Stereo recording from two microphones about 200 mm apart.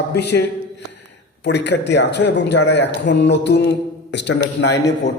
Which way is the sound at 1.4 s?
60° left (ahead or behind).